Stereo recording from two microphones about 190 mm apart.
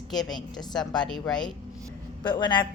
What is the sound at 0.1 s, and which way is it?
A woman's voice, centre (ahead or behind).